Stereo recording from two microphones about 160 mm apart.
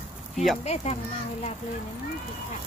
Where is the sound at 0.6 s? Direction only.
45° left (ahead or behind).